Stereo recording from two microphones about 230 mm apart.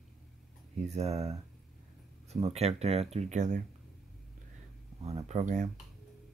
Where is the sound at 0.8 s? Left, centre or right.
Right.